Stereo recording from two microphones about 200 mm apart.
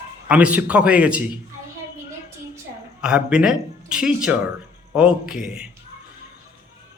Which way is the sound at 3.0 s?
5° right (ahead or behind).